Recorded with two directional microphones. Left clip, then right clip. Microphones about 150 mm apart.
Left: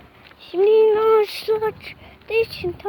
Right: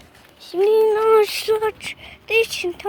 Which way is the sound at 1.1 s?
15° right (ahead or behind).